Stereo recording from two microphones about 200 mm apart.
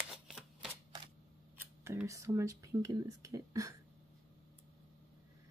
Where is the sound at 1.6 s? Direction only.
10° right (ahead or behind).